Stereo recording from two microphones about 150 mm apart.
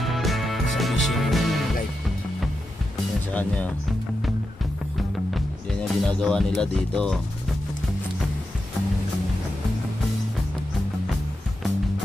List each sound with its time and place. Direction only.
0.0 s music: centre (ahead or behind)
3.3 s speech: 10° left (ahead or behind)
5.3 s music: 5° left (ahead or behind)